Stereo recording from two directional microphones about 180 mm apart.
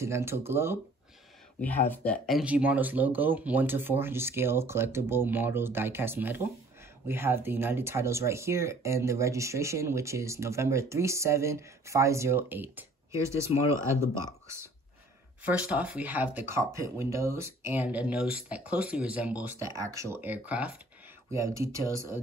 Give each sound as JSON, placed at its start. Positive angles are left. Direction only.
{"t": 0.0, "sound": "speech", "side_deg": -15}
{"t": 1.6, "sound": "speech", "side_deg": 10}
{"t": 15.4, "sound": "speech", "side_deg": -5}